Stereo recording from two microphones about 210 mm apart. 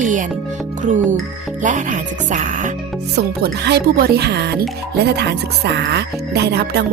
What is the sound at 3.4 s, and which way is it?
Speech, 50° right (ahead or behind).